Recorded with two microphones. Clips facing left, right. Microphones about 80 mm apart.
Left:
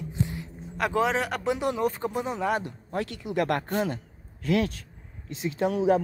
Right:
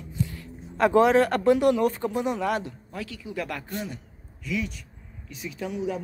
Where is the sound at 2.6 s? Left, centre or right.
Left.